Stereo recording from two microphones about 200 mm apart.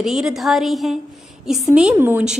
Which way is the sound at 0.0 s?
Centre (ahead or behind).